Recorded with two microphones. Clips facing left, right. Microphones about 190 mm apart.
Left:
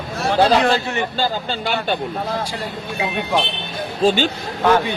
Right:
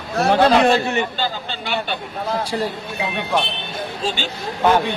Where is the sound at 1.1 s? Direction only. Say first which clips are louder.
Left 3 dB; 40° left (ahead or behind).